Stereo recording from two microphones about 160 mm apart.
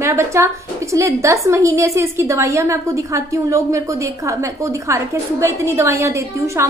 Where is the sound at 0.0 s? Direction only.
15° right (ahead or behind).